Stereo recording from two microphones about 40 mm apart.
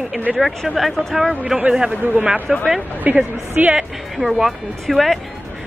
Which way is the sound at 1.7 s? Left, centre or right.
Centre.